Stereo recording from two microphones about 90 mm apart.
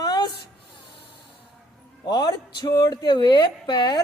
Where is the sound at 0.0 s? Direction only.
45° left (ahead or behind).